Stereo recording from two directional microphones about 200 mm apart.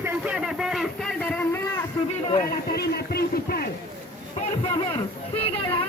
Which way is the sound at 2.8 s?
50° left (ahead or behind).